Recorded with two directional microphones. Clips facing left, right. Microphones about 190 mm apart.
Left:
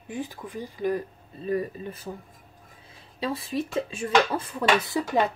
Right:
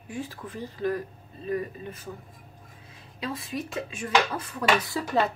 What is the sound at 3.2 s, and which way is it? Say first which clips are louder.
Speech: left 4 dB; 35° left (ahead or behind).